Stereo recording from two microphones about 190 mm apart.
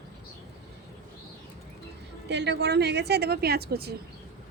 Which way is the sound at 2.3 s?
65° right (ahead or behind).